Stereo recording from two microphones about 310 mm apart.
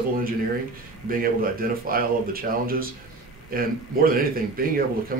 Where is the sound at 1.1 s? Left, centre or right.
Right.